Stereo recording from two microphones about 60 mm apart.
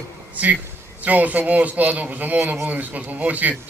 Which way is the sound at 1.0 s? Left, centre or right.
Right.